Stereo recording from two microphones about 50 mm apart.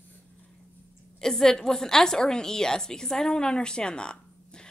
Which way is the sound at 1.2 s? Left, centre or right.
Centre.